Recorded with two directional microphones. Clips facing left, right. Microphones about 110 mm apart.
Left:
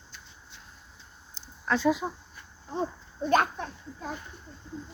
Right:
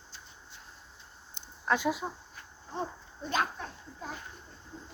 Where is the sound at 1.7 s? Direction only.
15° right (ahead or behind).